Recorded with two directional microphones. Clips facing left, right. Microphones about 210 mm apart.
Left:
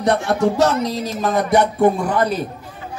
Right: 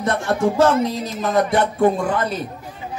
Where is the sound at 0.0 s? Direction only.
70° left (ahead or behind).